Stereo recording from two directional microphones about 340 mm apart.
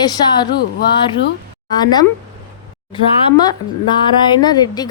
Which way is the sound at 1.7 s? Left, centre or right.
Centre.